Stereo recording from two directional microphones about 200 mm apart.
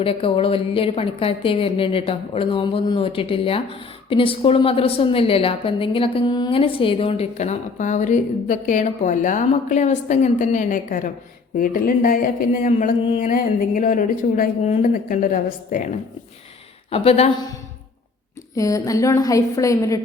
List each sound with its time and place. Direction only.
0.0 s a woman's voice: 25° left (ahead or behind)
16.9 s speech: 30° left (ahead or behind)
18.5 s a woman's voice: 15° left (ahead or behind)